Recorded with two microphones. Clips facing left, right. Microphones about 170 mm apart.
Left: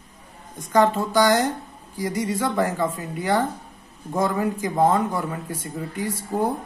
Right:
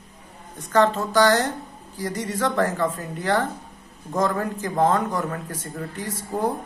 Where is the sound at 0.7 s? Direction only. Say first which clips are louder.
Left 1 dB; 10° left (ahead or behind).